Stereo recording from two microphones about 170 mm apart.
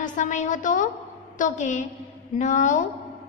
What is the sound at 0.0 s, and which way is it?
A woman's voice, 50° left (ahead or behind).